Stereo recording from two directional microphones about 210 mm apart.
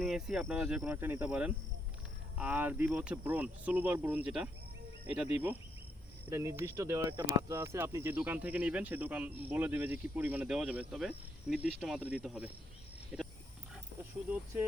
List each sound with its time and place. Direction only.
0.0 s speech: centre (ahead or behind)
13.1 s wild animals: centre (ahead or behind)